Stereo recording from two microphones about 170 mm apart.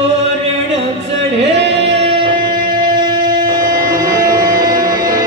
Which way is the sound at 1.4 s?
90° right.